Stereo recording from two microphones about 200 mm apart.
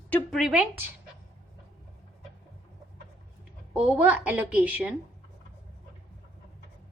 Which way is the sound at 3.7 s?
10° right (ahead or behind).